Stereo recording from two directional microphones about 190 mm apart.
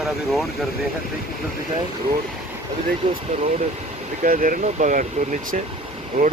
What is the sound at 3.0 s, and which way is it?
Speech, 25° right (ahead or behind).